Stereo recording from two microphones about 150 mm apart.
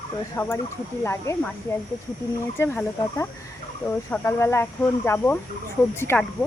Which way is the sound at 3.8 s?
15° left (ahead or behind).